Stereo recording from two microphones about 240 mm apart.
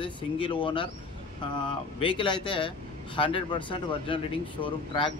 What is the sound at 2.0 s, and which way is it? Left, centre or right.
Speech, left.